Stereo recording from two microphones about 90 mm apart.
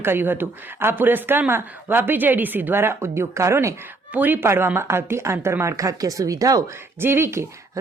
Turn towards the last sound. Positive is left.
turn(degrees=-30)  # may be behind; listen again after turning